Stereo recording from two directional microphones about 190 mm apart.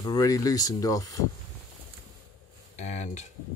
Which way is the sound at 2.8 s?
35° left (ahead or behind).